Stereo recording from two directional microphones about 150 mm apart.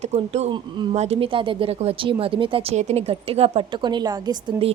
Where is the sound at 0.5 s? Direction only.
30° right (ahead or behind).